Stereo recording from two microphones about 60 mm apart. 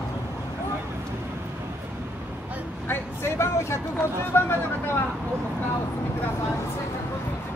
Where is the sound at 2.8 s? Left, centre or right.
Left.